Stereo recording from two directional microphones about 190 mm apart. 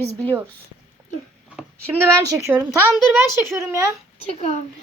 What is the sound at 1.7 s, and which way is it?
A woman's voice, 10° right (ahead or behind).